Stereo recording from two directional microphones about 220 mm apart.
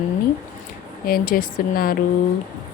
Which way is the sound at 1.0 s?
40° left (ahead or behind).